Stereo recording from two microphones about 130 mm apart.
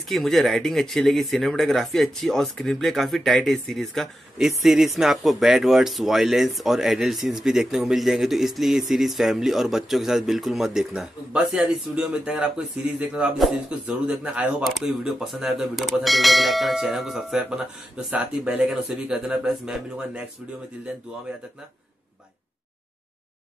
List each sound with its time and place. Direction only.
0.1 s speech: centre (ahead or behind)